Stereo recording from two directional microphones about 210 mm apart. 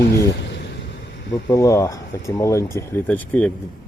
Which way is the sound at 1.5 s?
15° left (ahead or behind).